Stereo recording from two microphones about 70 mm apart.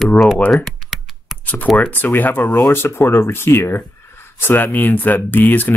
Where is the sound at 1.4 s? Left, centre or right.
Left.